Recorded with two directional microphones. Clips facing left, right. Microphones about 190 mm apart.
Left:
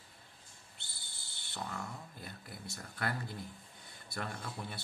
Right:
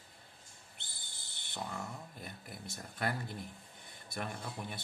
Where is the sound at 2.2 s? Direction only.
20° right (ahead or behind).